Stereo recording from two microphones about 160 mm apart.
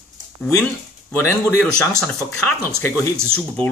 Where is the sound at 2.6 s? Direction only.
20° left (ahead or behind).